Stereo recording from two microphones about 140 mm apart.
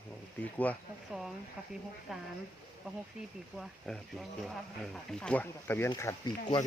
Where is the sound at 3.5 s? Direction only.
5° left (ahead or behind).